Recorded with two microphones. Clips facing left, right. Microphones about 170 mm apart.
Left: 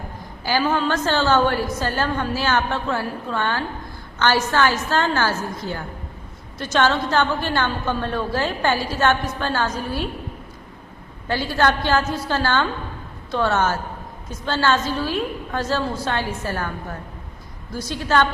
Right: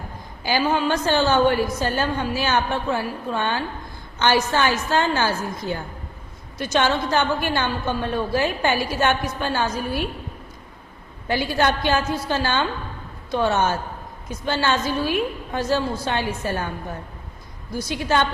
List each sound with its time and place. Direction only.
0.4 s a woman's voice: 15° right (ahead or behind)
11.3 s a woman's voice: 15° right (ahead or behind)
17.7 s a woman's voice: 15° right (ahead or behind)